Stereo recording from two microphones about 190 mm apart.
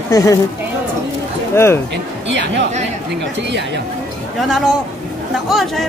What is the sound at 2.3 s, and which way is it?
Speech, 70° right (ahead or behind).